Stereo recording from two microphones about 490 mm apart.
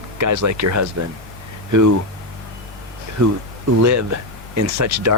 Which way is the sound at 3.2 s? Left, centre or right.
Right.